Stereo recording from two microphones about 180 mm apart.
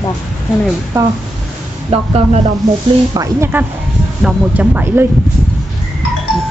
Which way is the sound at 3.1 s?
15° right (ahead or behind).